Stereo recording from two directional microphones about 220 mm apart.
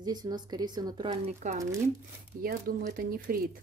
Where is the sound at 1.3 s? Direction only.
30° right (ahead or behind).